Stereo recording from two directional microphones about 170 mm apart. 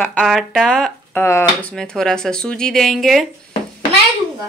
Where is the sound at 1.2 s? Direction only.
15° left (ahead or behind).